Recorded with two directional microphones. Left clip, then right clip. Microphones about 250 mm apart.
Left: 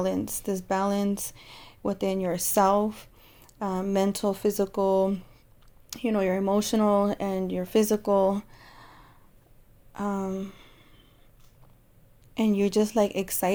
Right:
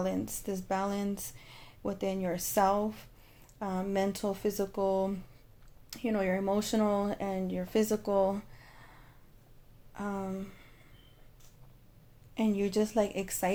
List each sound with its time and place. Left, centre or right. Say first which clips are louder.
0.0 s speech: left 6 dB; left
9.9 s a sound: left 6 dB; left
12.3 s speech: left 6 dB; left